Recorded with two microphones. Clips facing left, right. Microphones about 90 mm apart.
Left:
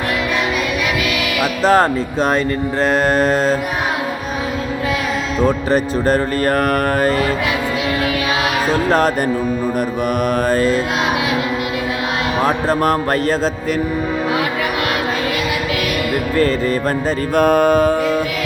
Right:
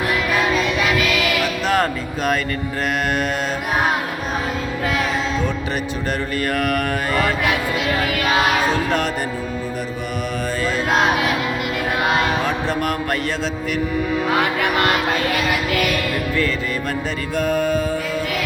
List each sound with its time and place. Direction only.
1.6 s speech: 35° left (ahead or behind)
5.5 s speech: 40° left (ahead or behind)
12.5 s speech: 40° left (ahead or behind)
17.3 s music: 55° left (ahead or behind)